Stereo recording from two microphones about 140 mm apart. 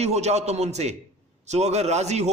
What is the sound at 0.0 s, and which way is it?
A man's voice, 50° right (ahead or behind).